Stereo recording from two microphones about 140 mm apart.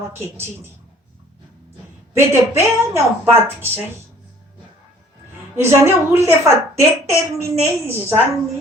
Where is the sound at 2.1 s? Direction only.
20° right (ahead or behind).